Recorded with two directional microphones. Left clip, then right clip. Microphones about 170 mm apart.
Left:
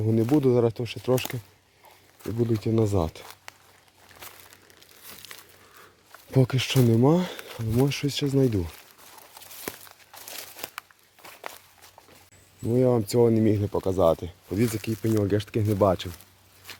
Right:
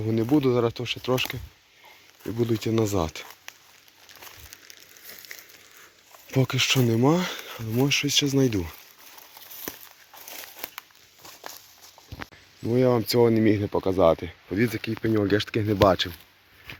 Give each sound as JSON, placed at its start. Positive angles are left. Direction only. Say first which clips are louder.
{"t": 0.0, "sound": "speech", "louder": "even", "side_deg": 15}
{"t": 2.4, "sound": "speech", "louder": "even", "side_deg": 0}
{"t": 6.3, "sound": "speech", "louder": "right 2 dB", "side_deg": 25}
{"t": 9.7, "sound": "walk", "louder": "left 2 dB", "side_deg": 20}
{"t": 10.2, "sound": "crumpling", "louder": "left 1 dB", "side_deg": 10}
{"t": 11.2, "sound": "walk", "louder": "left 2 dB", "side_deg": 15}
{"t": 12.6, "sound": "speech", "louder": "right 1 dB", "side_deg": 0}
{"t": 16.7, "sound": "a sound", "louder": "right 1 dB", "side_deg": 10}